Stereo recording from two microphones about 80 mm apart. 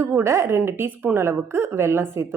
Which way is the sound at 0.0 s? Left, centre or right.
Right.